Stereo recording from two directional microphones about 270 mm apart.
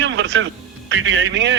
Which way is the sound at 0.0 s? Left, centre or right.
Right.